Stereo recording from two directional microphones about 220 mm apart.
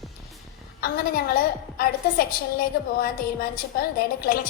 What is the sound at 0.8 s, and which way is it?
A woman's voice, 40° left (ahead or behind).